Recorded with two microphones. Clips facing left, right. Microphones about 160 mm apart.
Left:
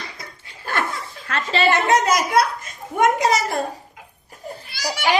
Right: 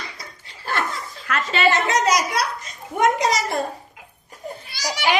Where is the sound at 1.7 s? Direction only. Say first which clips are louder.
Left 2 dB; 55° left (ahead or behind).